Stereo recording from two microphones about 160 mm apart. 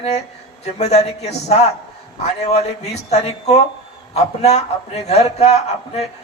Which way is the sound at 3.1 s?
45° left (ahead or behind).